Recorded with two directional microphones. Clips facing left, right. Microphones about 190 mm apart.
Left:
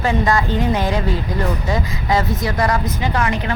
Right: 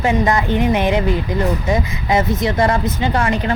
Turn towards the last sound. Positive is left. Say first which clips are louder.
# right 3 dB
turn(degrees=-30)  # may be behind; listen again after turning